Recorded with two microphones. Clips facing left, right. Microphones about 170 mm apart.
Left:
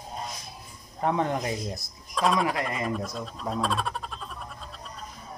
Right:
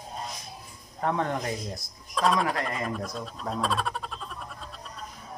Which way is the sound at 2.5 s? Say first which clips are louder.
Left 1 dB; 15° left (ahead or behind).